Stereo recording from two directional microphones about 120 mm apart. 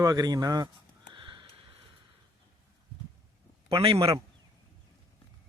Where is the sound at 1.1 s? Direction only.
40° right (ahead or behind).